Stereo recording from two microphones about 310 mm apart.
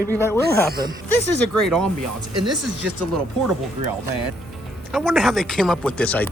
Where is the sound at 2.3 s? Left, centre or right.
Right.